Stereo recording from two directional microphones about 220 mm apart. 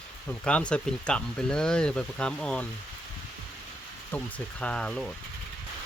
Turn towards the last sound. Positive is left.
turn(degrees=5)  # may be behind; listen again after turning